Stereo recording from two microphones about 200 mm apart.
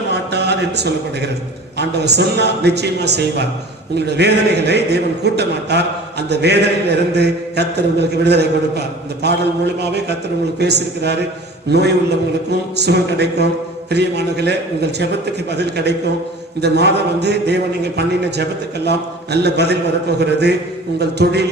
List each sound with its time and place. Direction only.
0.1 s a sound: 55° right (ahead or behind)
1.8 s a man's voice: 55° right (ahead or behind)
12.5 s a man's voice: 55° right (ahead or behind)